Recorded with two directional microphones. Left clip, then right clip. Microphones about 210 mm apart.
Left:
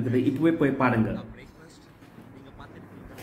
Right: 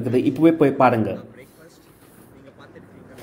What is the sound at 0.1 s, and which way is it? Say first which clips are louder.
Speech: right 7 dB; 30° right (ahead or behind).